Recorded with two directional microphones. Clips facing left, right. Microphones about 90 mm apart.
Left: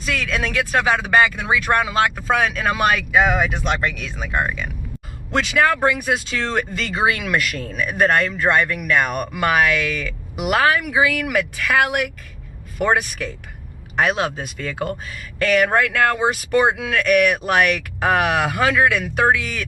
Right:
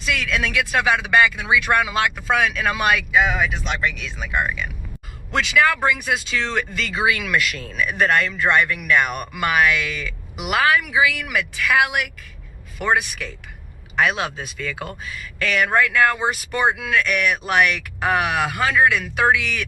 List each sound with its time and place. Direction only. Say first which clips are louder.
0.0 s speech: even; 40° left (ahead or behind)
3.5 s speech: left 2 dB; 50° left (ahead or behind)
4.2 s speech: left 1 dB; 35° left (ahead or behind)